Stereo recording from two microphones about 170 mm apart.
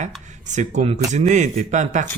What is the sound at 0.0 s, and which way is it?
Speech, 45° right (ahead or behind).